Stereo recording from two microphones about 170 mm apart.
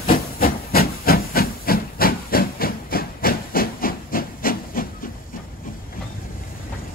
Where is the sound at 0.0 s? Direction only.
60° left (ahead or behind).